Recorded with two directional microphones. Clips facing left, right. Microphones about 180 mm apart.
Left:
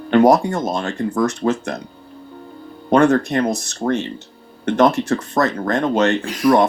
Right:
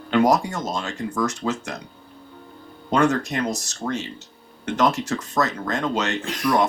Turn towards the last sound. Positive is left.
turn(degrees=55)  # may be behind; listen again after turning